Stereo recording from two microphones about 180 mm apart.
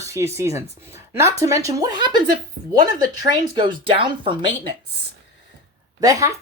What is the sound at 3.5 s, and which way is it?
Speech, 30° right (ahead or behind).